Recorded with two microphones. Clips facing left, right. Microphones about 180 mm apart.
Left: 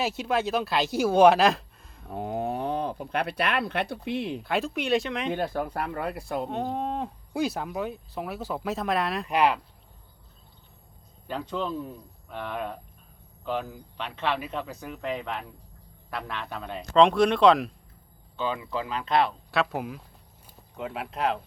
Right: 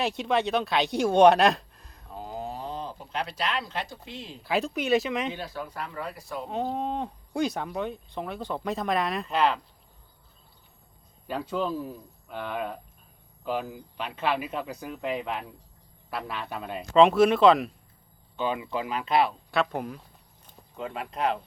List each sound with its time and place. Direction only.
0.0 s speech: centre (ahead or behind)
2.0 s speech: 60° left (ahead or behind)
4.4 s speech: centre (ahead or behind)
5.3 s speech: 55° left (ahead or behind)
6.5 s speech: centre (ahead or behind)
9.2 s speech: 15° left (ahead or behind)
11.3 s speech: 10° right (ahead or behind)
18.3 s speech: 15° right (ahead or behind); by 21.4 s centre (ahead or behind)